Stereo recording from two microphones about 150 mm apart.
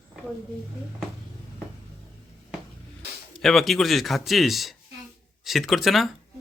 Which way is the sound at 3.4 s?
Centre (ahead or behind).